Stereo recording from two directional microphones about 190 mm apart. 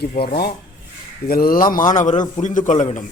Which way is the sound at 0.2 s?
55° left (ahead or behind).